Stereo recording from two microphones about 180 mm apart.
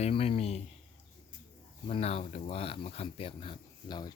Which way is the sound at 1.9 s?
35° left (ahead or behind).